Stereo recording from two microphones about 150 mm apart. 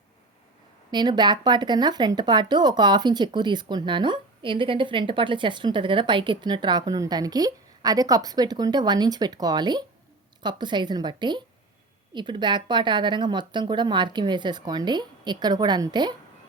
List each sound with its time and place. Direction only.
0.9 s speech: 30° right (ahead or behind)